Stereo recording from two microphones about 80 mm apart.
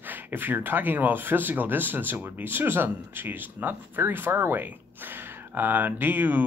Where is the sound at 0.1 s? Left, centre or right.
Right.